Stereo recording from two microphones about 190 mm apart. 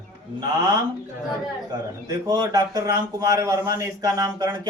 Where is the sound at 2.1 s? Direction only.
20° right (ahead or behind).